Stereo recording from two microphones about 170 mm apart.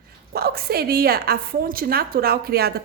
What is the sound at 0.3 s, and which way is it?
A woman's voice, 65° right (ahead or behind).